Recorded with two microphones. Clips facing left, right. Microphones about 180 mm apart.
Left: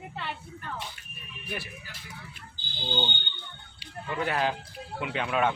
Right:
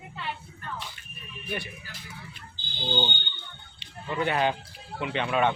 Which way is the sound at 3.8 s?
Centre (ahead or behind).